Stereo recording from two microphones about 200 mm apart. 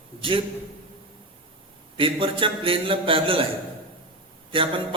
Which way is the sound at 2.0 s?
25° right (ahead or behind).